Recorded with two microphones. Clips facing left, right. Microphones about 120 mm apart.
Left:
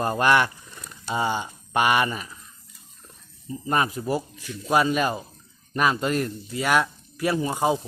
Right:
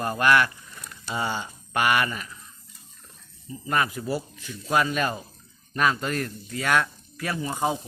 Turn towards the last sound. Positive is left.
turn(degrees=20)  # may be behind; listen again after turning